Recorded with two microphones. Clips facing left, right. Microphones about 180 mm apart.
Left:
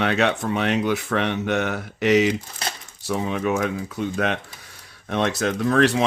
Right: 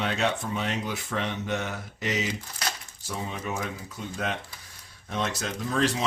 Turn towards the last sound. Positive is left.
turn(degrees=65)  # may be behind; listen again after turning